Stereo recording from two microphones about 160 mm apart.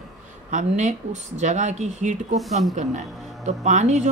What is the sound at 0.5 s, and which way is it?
Speech, 50° right (ahead or behind).